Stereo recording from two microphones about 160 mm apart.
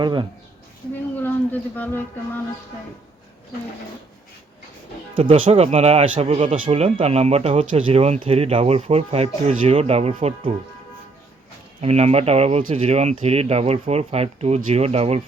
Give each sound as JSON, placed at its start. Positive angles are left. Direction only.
{"t": 0.0, "sound": "speech", "side_deg": -30}
{"t": 1.1, "sound": "a sound", "side_deg": 10}
{"t": 5.1, "sound": "speech", "side_deg": -35}
{"t": 11.8, "sound": "speech", "side_deg": -40}